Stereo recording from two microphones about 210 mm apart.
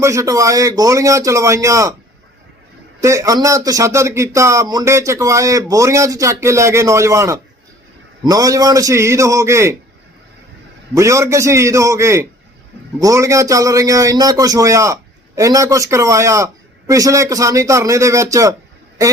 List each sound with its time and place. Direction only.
0.0 s speech: 15° right (ahead or behind)
3.0 s speech: 15° right (ahead or behind)
10.9 s speech: 15° right (ahead or behind)